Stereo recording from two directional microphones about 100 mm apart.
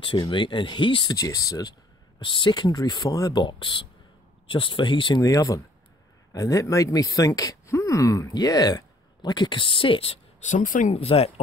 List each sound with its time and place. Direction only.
0.0 s speech: 50° left (ahead or behind)
1.1 s speech: 35° left (ahead or behind)
3.4 s speech: 55° left (ahead or behind)
5.2 s speech: 35° left (ahead or behind); by 11.4 s 80° left